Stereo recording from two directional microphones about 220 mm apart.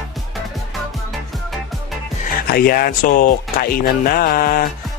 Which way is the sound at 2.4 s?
45° left (ahead or behind).